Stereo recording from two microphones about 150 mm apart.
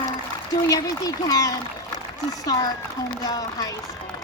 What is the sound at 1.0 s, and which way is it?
Speech, 25° left (ahead or behind).